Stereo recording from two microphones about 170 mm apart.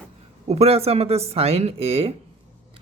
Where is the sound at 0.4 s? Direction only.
40° right (ahead or behind).